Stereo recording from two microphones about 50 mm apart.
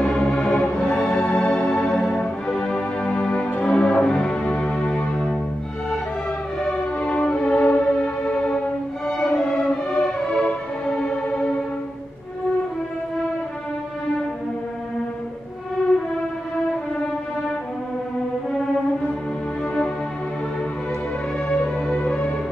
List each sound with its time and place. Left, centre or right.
0.0 s music: centre
0.7 s music: centre
2.5 s music: centre
6.6 s music: left
9.0 s music: centre
21.5 s music: left